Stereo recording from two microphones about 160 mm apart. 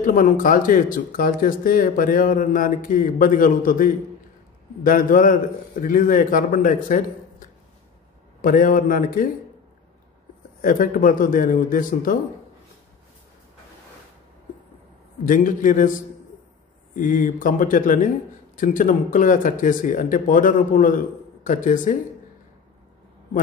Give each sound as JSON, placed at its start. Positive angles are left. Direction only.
{"t": 0.0, "sound": "speech", "side_deg": 55}
{"t": 10.6, "sound": "speech", "side_deg": 60}
{"t": 15.2, "sound": "speech", "side_deg": 55}
{"t": 16.9, "sound": "speech", "side_deg": 55}